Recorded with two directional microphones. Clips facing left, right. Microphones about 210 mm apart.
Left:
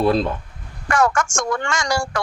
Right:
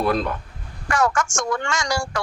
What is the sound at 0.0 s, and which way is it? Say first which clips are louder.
Speech: left 4 dB; 25° left (ahead or behind).